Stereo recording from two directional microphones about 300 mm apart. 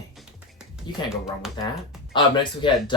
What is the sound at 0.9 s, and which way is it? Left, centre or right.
Speech, centre.